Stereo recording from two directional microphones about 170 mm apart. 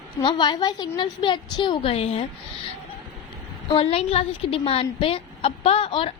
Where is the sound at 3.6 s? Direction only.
35° left (ahead or behind).